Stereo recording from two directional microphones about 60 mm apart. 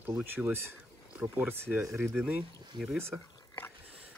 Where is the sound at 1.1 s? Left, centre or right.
Right.